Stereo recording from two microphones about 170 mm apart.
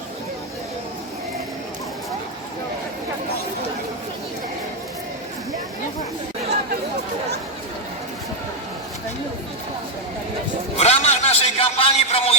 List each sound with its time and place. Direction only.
10.8 s a man's voice: 40° left (ahead or behind)